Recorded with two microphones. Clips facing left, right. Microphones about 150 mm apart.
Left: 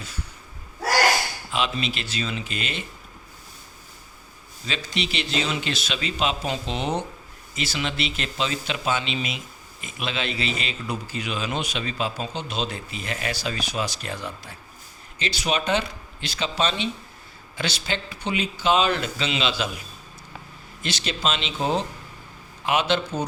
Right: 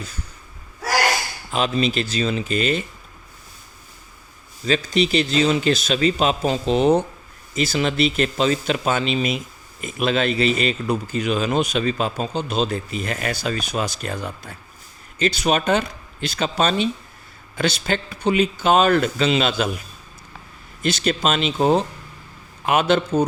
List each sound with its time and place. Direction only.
1.5 s speech: 40° right (ahead or behind)
4.6 s a man's voice: 45° right (ahead or behind)
20.8 s a man's voice: 50° right (ahead or behind)